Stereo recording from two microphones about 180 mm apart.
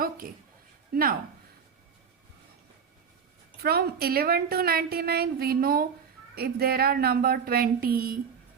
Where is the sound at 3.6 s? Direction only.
60° right (ahead or behind).